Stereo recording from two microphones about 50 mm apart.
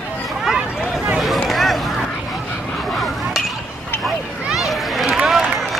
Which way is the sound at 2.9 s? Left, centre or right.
Centre.